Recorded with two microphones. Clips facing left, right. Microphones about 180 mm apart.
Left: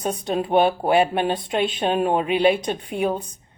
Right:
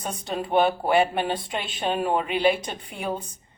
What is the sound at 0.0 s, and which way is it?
Speech, 60° left (ahead or behind).